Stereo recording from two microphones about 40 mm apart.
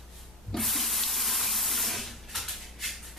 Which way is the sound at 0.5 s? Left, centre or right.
Centre.